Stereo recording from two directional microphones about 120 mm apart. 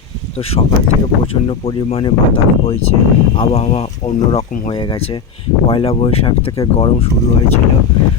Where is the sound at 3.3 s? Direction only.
55° left (ahead or behind).